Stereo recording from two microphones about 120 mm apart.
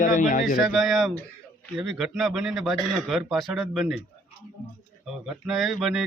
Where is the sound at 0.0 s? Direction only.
90° left.